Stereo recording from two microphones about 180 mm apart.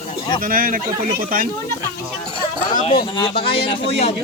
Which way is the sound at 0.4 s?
50° right (ahead or behind).